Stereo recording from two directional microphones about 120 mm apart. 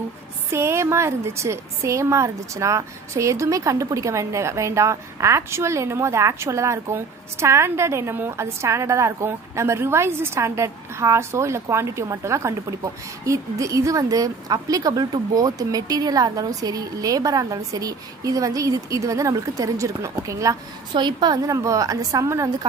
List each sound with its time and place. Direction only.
0.5 s a woman's voice: 20° right (ahead or behind)